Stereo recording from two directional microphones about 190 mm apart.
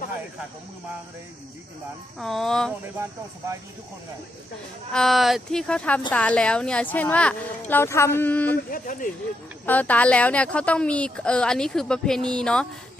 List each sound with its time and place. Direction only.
2.1 s speech: centre (ahead or behind)
4.9 s a woman's voice: centre (ahead or behind)
8.7 s speech: 45° left (ahead or behind)
9.6 s speech: 10° left (ahead or behind)